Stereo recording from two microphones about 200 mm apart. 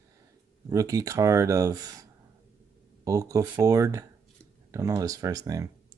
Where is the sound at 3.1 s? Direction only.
15° right (ahead or behind).